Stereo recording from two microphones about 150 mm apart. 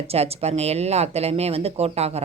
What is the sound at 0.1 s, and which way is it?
Speech, 40° right (ahead or behind).